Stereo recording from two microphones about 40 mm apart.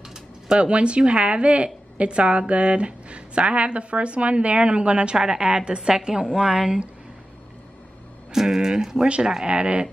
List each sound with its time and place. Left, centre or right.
0.6 s a woman's voice: right
8.3 s a woman's voice: centre; by 9.8 s right